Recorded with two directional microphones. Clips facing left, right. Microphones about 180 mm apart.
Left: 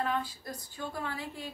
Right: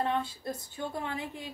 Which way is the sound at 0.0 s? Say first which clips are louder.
Right 2 dB; 25° right (ahead or behind).